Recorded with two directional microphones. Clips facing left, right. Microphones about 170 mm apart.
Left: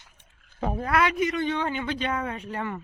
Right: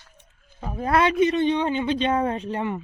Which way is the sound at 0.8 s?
25° right (ahead or behind).